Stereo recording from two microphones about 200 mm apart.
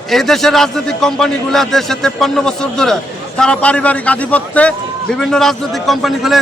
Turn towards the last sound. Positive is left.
turn(degrees=0)  # may be behind; listen again after turning